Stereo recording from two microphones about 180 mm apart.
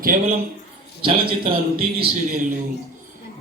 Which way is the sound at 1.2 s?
55° right (ahead or behind).